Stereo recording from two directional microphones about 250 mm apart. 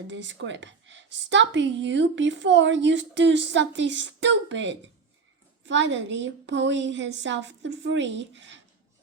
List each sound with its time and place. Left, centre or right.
0.1 s a woman's voice: right